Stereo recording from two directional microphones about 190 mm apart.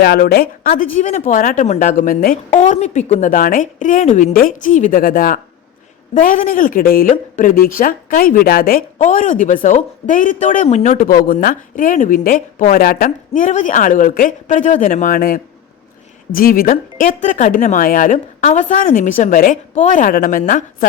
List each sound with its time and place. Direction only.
0.0 s a woman's voice: 55° left (ahead or behind)
0.9 s a woman's voice: 40° left (ahead or behind)